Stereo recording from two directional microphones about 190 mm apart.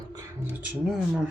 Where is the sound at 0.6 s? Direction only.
5° right (ahead or behind).